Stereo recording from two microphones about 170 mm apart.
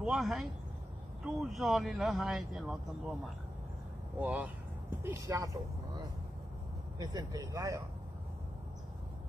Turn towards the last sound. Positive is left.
turn(degrees=-20)  # may be behind; listen again after turning